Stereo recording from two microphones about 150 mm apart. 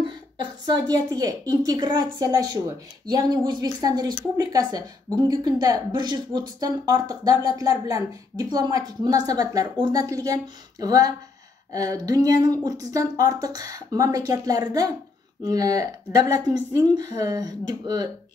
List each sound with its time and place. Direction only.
0.7 s speech: 25° right (ahead or behind)